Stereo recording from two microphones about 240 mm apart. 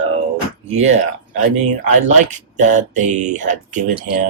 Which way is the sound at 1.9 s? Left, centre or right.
Right.